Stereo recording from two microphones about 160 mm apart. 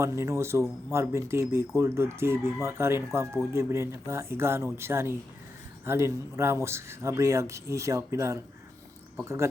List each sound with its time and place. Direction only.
0.0 s speech: 15° right (ahead or behind)